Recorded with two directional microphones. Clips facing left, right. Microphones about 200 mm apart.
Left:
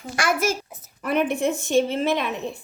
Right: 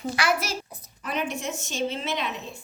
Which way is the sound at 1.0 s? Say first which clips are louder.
Left 8 dB; 55° left (ahead or behind).